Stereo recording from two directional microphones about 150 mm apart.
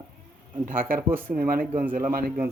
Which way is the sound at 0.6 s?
65° right (ahead or behind).